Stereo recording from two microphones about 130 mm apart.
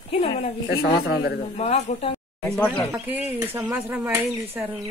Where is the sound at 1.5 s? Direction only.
55° left (ahead or behind).